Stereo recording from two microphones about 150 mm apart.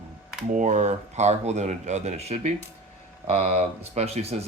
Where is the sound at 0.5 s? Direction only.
55° right (ahead or behind).